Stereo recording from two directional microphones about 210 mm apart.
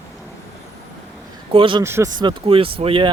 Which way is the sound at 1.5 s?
25° right (ahead or behind).